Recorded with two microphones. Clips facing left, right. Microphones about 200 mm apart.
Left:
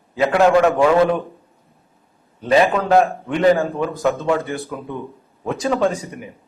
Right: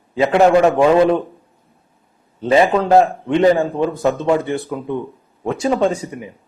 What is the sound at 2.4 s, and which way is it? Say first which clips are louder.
A man's voice: right 2 dB; 25° right (ahead or behind).